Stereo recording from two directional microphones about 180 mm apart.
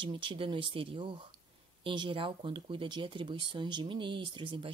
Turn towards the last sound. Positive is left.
turn(degrees=-25)  # may be behind; listen again after turning